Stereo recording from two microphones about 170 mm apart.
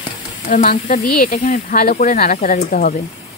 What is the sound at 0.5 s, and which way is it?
Speech, 50° left (ahead or behind).